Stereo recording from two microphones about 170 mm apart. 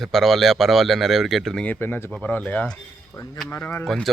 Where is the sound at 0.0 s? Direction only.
Centre (ahead or behind).